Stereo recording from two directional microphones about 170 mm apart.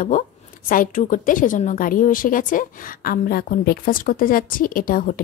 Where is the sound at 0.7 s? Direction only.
50° left (ahead or behind).